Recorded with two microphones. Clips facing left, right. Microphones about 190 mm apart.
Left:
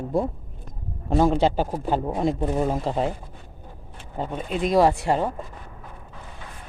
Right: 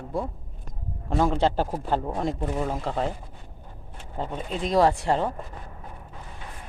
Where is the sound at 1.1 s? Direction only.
10° left (ahead or behind).